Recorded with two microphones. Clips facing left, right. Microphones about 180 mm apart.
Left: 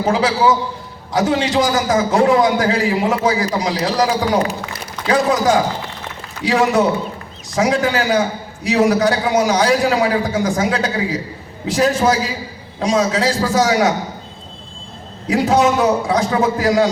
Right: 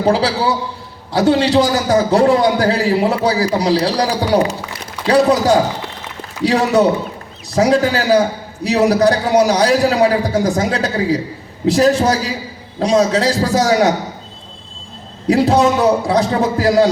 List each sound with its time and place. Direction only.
0.0 s a man's voice: 35° right (ahead or behind)
15.3 s a man's voice: 35° right (ahead or behind)